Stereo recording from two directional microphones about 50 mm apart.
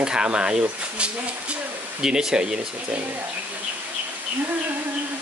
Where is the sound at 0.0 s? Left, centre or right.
Centre.